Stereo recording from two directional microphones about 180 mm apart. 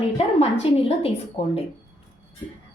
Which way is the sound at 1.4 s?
35° left (ahead or behind).